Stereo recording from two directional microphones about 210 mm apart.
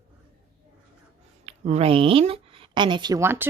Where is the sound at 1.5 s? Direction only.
30° right (ahead or behind).